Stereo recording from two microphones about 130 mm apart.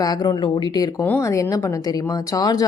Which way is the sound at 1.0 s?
20° left (ahead or behind).